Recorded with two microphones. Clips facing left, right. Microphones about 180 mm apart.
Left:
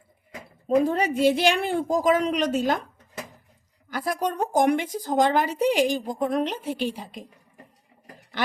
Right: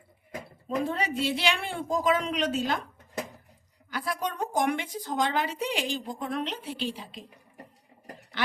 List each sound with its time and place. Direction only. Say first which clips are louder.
0.8 s speech: left 7 dB; 45° left (ahead or behind)
3.8 s speech: left 5 dB; 45° left (ahead or behind)